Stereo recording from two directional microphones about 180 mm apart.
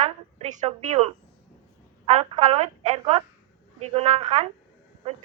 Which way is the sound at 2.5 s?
40° right (ahead or behind).